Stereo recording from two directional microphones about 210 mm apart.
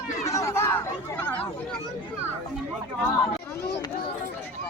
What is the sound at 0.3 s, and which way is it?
Chatter, 15° left (ahead or behind).